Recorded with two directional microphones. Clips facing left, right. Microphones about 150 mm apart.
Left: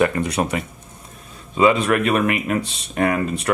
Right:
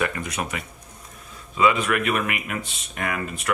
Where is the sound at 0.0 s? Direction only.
30° left (ahead or behind).